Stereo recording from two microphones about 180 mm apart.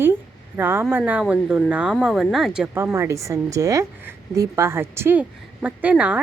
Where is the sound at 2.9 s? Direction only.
15° right (ahead or behind).